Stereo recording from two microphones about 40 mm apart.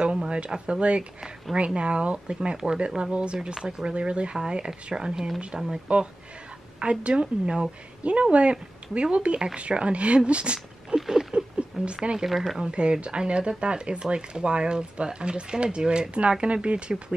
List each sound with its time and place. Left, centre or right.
0.0 s speech: right
3.5 s speech: centre
3.9 s speech: right; by 5.7 s centre
5.9 s speech: right
11.0 s patter: centre
11.3 s a sound: right
12.3 s speech: centre
12.5 s speech: right